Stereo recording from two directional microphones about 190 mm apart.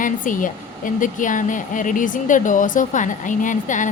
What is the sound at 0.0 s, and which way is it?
Speech, 45° left (ahead or behind).